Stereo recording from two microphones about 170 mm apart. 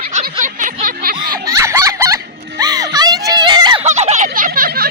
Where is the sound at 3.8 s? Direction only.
40° right (ahead or behind); by 4.8 s 60° right (ahead or behind).